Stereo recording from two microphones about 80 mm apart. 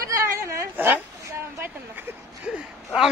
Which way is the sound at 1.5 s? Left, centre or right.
Right.